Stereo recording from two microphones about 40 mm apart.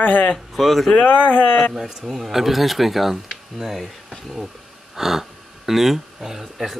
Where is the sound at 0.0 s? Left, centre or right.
Left.